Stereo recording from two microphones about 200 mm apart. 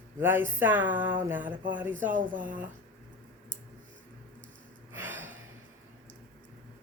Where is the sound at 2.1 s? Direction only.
40° right (ahead or behind).